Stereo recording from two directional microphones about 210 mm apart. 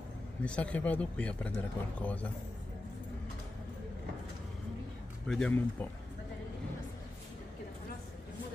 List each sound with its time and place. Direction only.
0.5 s speech: 5° left (ahead or behind)
5.2 s speech: 5° left (ahead or behind)